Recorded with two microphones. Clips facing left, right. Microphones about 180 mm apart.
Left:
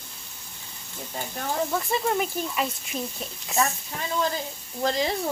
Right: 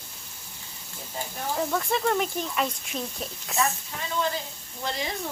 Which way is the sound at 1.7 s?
Centre (ahead or behind).